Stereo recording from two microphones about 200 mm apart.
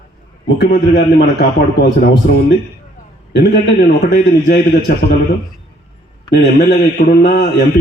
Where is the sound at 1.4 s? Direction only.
55° left (ahead or behind).